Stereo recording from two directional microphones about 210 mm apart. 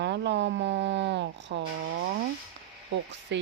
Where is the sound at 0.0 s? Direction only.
55° right (ahead or behind).